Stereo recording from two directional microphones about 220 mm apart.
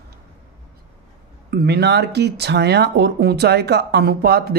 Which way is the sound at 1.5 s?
50° right (ahead or behind).